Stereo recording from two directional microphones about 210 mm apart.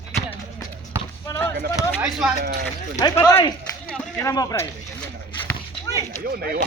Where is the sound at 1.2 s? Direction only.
15° left (ahead or behind).